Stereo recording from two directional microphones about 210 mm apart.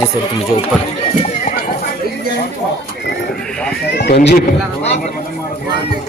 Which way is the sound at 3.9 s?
50° left (ahead or behind).